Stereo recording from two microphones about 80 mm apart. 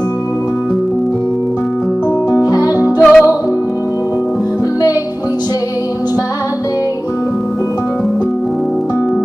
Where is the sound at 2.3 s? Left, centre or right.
Left.